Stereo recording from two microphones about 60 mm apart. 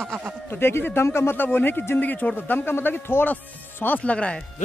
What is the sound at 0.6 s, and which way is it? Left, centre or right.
Speech, left.